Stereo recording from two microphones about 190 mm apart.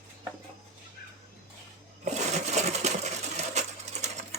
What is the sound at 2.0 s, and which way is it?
Coin, 35° right (ahead or behind).